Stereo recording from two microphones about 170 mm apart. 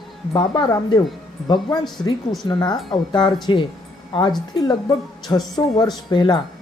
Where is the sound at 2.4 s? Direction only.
25° left (ahead or behind).